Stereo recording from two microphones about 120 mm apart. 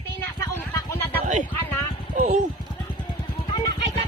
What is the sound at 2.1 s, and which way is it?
Speech, 70° right (ahead or behind).